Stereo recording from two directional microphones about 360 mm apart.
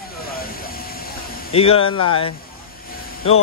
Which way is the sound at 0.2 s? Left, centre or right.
Left.